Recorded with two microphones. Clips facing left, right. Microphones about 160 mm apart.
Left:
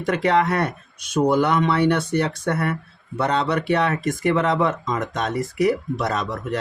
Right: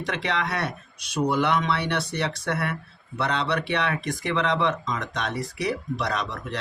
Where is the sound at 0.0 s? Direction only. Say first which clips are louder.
Left 9 dB; 45° left (ahead or behind).